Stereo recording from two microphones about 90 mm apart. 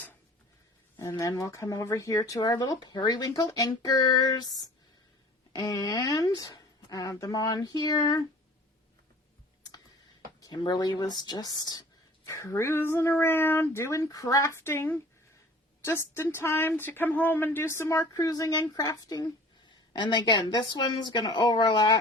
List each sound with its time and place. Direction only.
1.2 s speech: 40° left (ahead or behind)
10.4 s speech: 55° left (ahead or behind)
12.2 s speech: 40° left (ahead or behind)
18.0 s speech: 45° left (ahead or behind)